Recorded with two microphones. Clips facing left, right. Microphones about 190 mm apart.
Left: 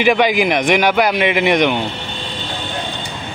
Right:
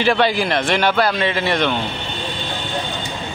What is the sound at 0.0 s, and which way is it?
A man's voice, 15° left (ahead or behind).